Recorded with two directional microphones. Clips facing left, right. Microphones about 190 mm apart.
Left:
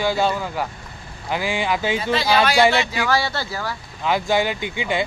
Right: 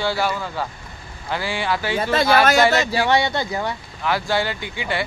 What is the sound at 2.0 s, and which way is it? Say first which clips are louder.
Speech: right 4 dB; 50° right (ahead or behind).